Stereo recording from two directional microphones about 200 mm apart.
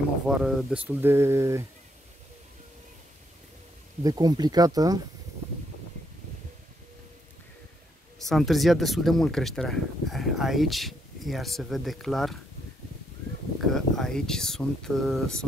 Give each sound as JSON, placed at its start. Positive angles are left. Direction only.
{"t": 0.4, "sound": "speech", "side_deg": 0}
{"t": 4.0, "sound": "speech", "side_deg": -20}
{"t": 8.2, "sound": "speech", "side_deg": 0}
{"t": 13.7, "sound": "speech", "side_deg": 0}